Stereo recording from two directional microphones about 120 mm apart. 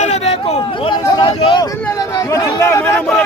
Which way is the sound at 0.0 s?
65° left (ahead or behind).